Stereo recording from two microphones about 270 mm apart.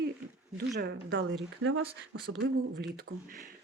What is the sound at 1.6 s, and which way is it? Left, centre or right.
Speech, right.